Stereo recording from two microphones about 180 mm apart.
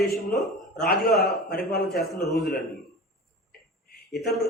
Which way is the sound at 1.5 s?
60° left (ahead or behind).